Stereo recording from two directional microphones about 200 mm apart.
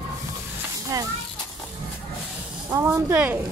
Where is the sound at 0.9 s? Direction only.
20° right (ahead or behind).